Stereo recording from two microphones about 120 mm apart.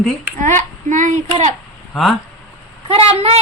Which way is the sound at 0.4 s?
90° right.